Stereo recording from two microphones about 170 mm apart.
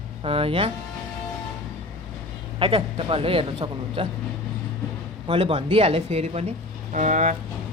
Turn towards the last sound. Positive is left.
turn(degrees=-45)  # may be behind; listen again after turning